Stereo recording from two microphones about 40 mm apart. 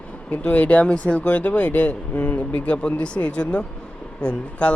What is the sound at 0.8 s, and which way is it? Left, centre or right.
Speech, left.